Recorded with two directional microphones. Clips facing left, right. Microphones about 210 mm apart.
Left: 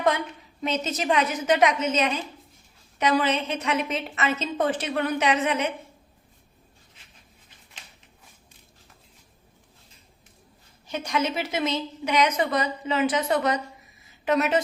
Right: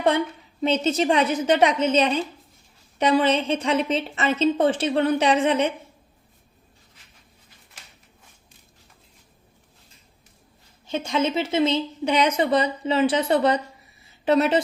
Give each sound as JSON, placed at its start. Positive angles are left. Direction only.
{"t": 0.6, "sound": "a woman's voice", "side_deg": -30}
{"t": 10.8, "sound": "a woman's voice", "side_deg": -25}